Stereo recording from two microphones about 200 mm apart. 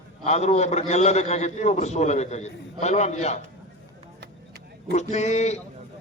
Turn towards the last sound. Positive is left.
turn(degrees=35)  # may be behind; listen again after turning